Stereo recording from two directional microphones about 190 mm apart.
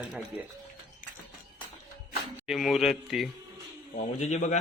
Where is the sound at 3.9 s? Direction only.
35° left (ahead or behind).